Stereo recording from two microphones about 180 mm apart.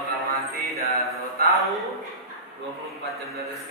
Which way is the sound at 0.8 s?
35° left (ahead or behind).